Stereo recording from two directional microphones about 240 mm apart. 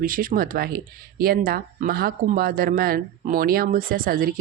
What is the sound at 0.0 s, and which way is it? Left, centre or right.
Speech, right.